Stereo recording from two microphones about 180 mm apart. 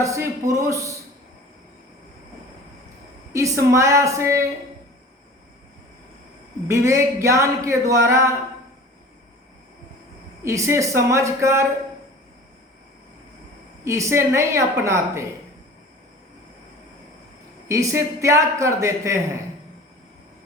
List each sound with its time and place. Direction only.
0.0 s speech: 15° right (ahead or behind)
3.3 s speech: 15° right (ahead or behind)
6.7 s speech: 15° right (ahead or behind)
10.4 s speech: 15° right (ahead or behind)
13.8 s speech: 15° right (ahead or behind)
17.7 s speech: 15° right (ahead or behind)